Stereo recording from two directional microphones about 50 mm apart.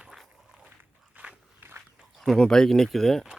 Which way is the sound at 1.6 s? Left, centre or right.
Right.